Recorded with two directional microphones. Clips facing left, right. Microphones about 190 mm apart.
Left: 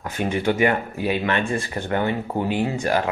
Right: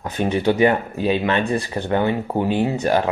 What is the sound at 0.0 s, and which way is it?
Speech, 20° right (ahead or behind).